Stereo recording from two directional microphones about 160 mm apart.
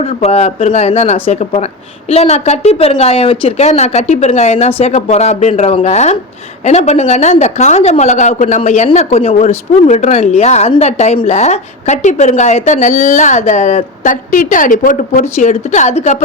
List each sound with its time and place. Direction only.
0.0 s a woman's voice: 40° left (ahead or behind)